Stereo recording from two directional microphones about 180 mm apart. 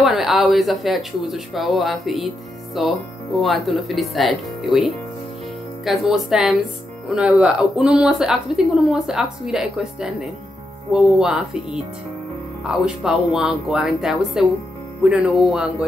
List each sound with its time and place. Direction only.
0.0 s speech: centre (ahead or behind)